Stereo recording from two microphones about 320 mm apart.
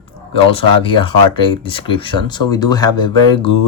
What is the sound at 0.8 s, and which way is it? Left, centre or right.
Speech, centre.